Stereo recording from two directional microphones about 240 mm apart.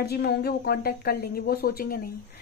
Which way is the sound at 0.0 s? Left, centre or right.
Left.